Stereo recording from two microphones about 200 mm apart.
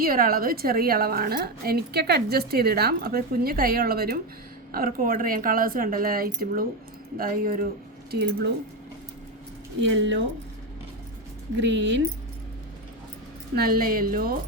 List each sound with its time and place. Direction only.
0.0 s a woman's voice: 45° right (ahead or behind)
9.8 s speech: 65° right (ahead or behind)
11.6 s speech: 65° right (ahead or behind)
13.6 s a woman's voice: 45° right (ahead or behind)